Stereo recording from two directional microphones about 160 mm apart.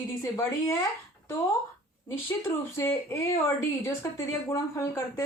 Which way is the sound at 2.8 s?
15° left (ahead or behind).